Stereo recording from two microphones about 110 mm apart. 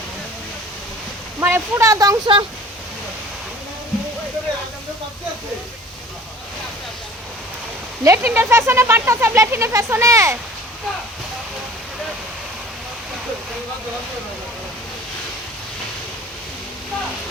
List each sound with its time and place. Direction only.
1.4 s speech: 20° right (ahead or behind)
8.0 s speech: 20° right (ahead or behind)